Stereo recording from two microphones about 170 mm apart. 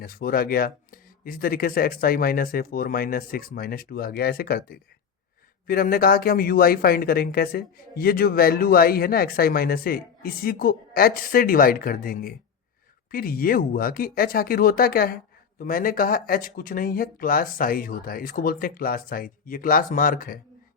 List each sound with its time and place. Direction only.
0.0 s speech: 60° left (ahead or behind)